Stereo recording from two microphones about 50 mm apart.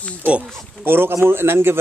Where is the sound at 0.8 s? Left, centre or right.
Right.